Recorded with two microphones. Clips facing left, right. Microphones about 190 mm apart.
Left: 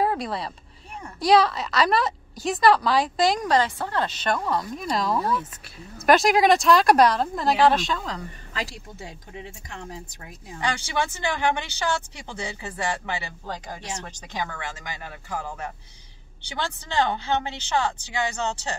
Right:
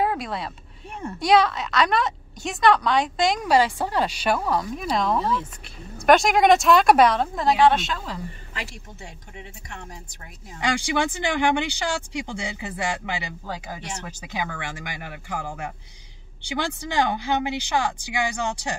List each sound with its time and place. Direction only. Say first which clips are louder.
0.0 s speech: even; centre (ahead or behind)
3.4 s speech: right 2 dB; 10° right (ahead or behind)
10.8 s speech: right 3 dB; 15° right (ahead or behind)